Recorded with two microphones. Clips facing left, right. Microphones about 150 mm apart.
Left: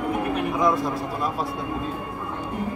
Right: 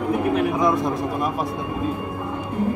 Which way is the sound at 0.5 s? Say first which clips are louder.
Right 2 dB; 20° right (ahead or behind).